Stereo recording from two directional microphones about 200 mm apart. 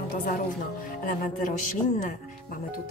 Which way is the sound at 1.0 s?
45° left (ahead or behind).